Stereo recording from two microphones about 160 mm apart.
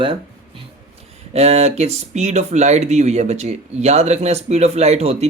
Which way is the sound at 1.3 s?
40° right (ahead or behind).